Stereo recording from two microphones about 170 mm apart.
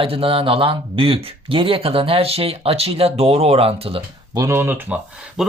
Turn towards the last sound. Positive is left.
turn(degrees=-5)  # may be behind; listen again after turning